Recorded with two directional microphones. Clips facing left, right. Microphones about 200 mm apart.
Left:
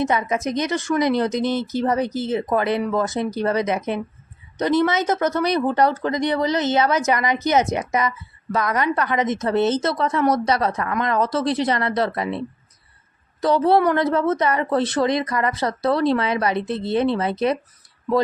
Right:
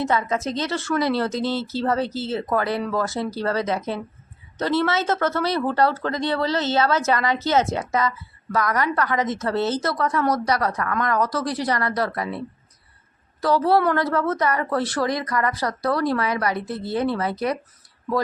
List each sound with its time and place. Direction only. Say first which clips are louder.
0.0 s speech: left 2 dB; 20° left (ahead or behind)